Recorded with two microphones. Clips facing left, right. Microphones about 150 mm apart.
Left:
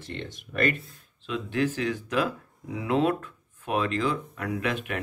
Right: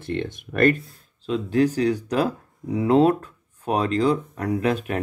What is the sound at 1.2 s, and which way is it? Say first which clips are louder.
Speech: right 7 dB; 40° right (ahead or behind).